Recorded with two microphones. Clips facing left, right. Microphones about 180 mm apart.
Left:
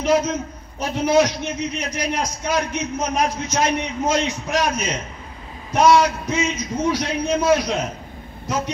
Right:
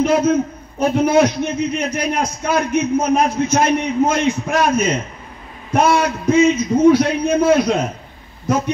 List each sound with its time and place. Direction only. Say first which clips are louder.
0.0 s a man's voice: right 5 dB; 55° right (ahead or behind)